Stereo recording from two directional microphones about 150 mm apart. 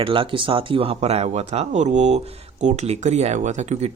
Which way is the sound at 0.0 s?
35° right (ahead or behind).